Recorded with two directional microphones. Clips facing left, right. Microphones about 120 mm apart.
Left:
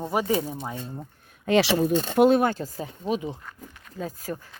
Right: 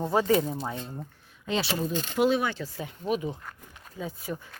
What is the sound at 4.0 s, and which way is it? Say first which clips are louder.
Speech: left 3 dB; 40° left (ahead or behind).